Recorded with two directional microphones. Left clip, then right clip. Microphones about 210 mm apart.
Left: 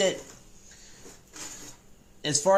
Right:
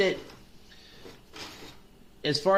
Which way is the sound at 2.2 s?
15° left (ahead or behind).